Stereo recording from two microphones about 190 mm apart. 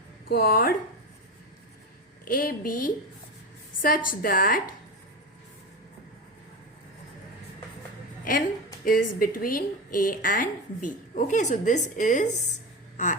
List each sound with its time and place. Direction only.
0.3 s a woman's voice: 50° left (ahead or behind)
2.2 s a woman's voice: 50° left (ahead or behind)
8.2 s a woman's voice: 45° left (ahead or behind)